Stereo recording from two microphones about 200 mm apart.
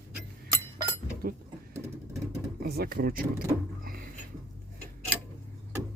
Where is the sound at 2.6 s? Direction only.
50° right (ahead or behind).